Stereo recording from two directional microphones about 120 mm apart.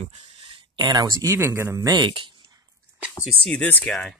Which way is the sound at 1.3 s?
20° right (ahead or behind).